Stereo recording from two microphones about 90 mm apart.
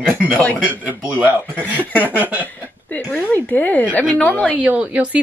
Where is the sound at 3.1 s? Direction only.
15° left (ahead or behind).